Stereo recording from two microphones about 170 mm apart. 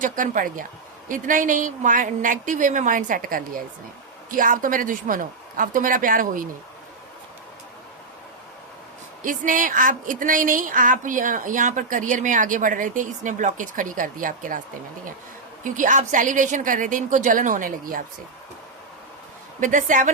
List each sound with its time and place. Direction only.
0.0 s a woman's voice: 55° right (ahead or behind)
9.2 s a woman's voice: 50° right (ahead or behind)
15.6 s a woman's voice: 50° right (ahead or behind)
19.5 s a woman's voice: 50° right (ahead or behind)